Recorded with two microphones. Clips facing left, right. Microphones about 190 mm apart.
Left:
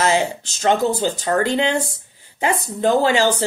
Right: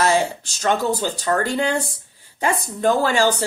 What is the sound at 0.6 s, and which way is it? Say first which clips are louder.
A woman's voice: left 3 dB; 20° left (ahead or behind).